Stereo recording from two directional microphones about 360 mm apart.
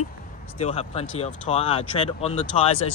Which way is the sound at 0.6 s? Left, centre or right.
Centre.